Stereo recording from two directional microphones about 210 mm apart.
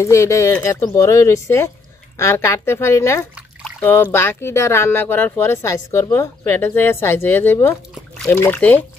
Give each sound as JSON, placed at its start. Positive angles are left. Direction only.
{"t": 0.0, "sound": "speech", "side_deg": 15}